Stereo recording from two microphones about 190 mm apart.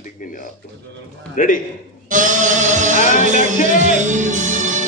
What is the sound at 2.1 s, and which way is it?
Music, 40° right (ahead or behind).